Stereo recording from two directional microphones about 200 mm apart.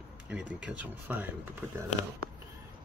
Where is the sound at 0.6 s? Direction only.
5° right (ahead or behind).